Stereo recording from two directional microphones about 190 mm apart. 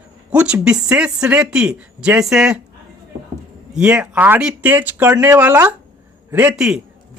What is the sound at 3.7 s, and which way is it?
A man's voice, 5° right (ahead or behind).